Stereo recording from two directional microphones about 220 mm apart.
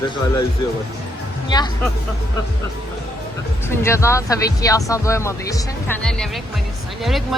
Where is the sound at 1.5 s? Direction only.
20° left (ahead or behind).